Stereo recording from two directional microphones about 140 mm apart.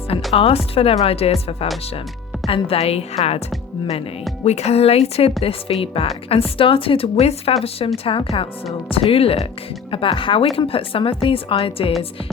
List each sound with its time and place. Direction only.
0.3 s a woman's voice: 45° left (ahead or behind)
4.4 s a woman's voice: 50° left (ahead or behind)